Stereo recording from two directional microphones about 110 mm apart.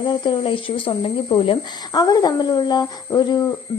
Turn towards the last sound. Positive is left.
turn(degrees=40)  # may be behind; listen again after turning